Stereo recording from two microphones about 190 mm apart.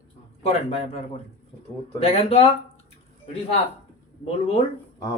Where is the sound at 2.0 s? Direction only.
35° left (ahead or behind).